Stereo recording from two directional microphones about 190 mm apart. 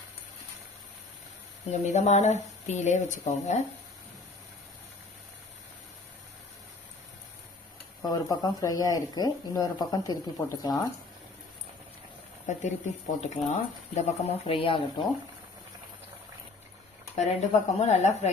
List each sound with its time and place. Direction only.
1.7 s speech: 35° left (ahead or behind)
8.0 s speech: 20° left (ahead or behind)
12.5 s speech: 40° left (ahead or behind)
17.2 s speech: 35° left (ahead or behind)